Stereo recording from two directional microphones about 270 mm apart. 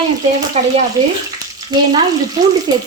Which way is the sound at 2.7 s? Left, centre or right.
Centre.